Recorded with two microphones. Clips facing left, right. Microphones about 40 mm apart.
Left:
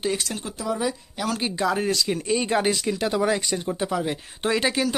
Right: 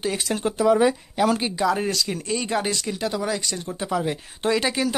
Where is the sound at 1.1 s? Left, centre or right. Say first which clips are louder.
Right 7 dB; centre.